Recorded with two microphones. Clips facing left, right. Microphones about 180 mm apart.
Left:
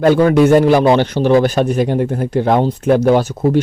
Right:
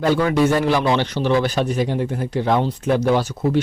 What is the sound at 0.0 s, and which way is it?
A man's voice, 55° left (ahead or behind).